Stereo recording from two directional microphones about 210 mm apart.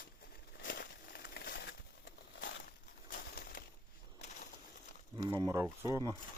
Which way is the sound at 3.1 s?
40° left (ahead or behind).